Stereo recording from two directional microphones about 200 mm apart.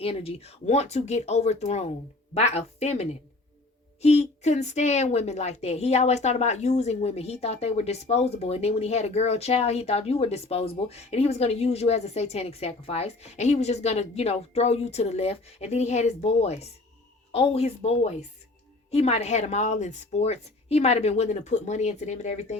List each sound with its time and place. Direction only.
0.0 s a woman's voice: 30° left (ahead or behind)